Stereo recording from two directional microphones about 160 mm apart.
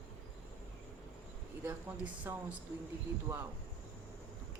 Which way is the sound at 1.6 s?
15° right (ahead or behind).